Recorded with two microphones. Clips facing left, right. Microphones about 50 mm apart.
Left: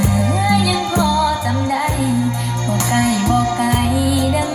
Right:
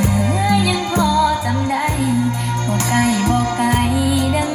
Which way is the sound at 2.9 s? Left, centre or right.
Right.